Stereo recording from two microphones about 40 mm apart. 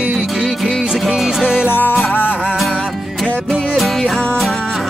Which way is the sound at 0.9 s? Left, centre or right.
Centre.